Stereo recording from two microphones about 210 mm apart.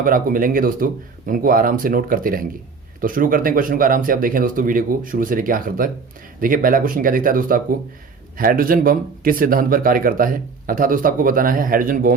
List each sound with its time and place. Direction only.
0.0 s speech: 40° right (ahead or behind)